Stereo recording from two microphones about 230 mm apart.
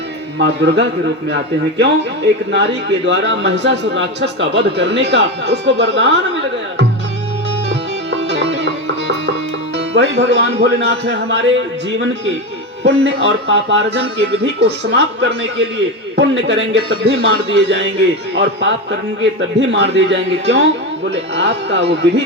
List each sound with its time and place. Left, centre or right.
0.3 s a man's voice: right
7.7 s music: right
9.7 s a man's voice: right